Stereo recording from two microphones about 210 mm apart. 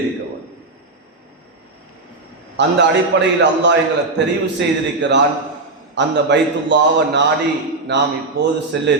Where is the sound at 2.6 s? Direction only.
55° right (ahead or behind).